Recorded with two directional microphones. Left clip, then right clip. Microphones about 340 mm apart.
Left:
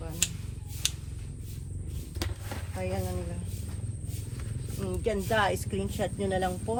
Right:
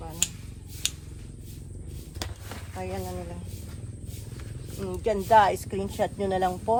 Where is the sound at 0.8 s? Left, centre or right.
Centre.